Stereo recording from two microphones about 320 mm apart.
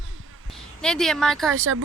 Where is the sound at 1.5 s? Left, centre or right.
Right.